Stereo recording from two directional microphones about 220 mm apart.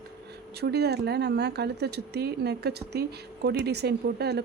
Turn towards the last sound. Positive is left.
turn(degrees=-45)  # may be behind; listen again after turning